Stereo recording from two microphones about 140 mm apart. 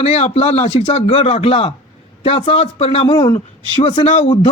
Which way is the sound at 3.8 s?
50° left (ahead or behind).